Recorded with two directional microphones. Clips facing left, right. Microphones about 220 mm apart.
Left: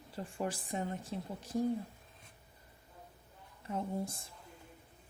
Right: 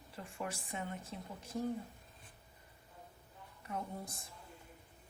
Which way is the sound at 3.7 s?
25° left (ahead or behind).